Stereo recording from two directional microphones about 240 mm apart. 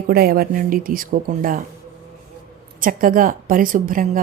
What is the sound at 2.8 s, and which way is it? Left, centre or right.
Speech, right.